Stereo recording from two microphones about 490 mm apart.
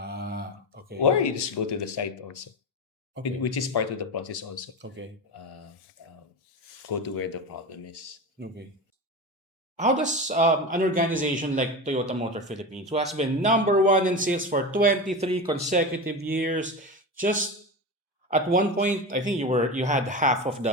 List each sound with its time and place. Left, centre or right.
0.0 s a sound: centre
1.2 s speech: left
3.4 s speech: left
6.9 s speech: left
9.7 s speech: centre